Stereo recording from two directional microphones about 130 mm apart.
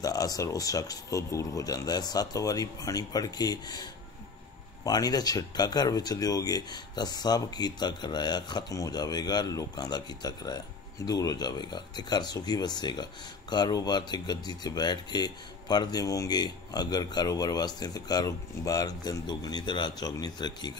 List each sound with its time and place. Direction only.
0.0 s speech: 30° left (ahead or behind)